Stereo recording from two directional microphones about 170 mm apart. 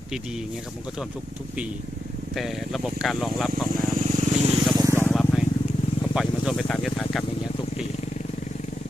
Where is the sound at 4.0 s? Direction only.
45° right (ahead or behind).